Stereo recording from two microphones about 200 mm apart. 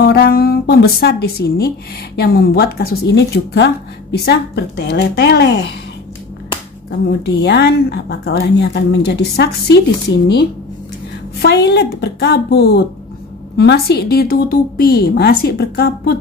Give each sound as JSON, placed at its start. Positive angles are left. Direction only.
{"t": 0.0, "sound": "music", "side_deg": 50}
{"t": 2.1, "sound": "a woman's voice", "side_deg": 50}
{"t": 7.2, "sound": "a woman's voice", "side_deg": 55}